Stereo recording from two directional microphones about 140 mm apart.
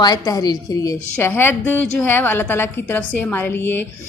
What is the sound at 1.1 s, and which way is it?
A woman's voice, 15° left (ahead or behind).